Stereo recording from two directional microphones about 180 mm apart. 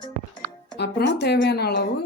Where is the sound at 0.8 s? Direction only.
65° left (ahead or behind).